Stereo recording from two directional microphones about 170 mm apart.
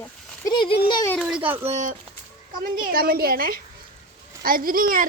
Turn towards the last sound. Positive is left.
turn(degrees=-55)  # may be behind; listen again after turning